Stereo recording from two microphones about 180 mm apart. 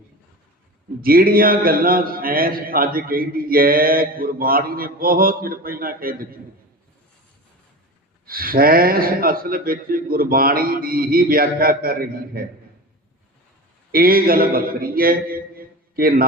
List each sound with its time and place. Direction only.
1.0 s a man's voice: 55° right (ahead or behind)
8.3 s a man's voice: 55° right (ahead or behind)
13.9 s a man's voice: 55° right (ahead or behind)